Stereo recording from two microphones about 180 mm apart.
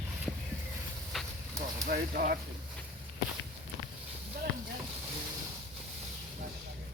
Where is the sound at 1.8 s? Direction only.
50° right (ahead or behind).